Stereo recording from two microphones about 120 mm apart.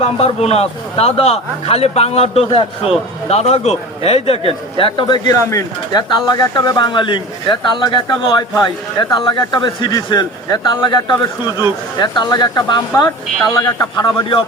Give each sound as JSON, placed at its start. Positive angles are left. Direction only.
{"t": 0.0, "sound": "a man's voice", "side_deg": 60}